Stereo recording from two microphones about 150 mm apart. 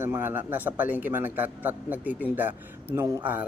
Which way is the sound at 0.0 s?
15° right (ahead or behind).